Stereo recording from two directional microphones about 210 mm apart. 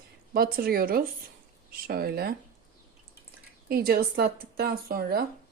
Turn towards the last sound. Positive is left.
turn(degrees=-45)  # may be behind; listen again after turning